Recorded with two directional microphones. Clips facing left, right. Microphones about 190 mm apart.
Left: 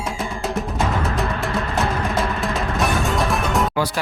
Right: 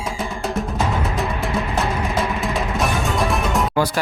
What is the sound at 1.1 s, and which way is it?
Music, centre (ahead or behind).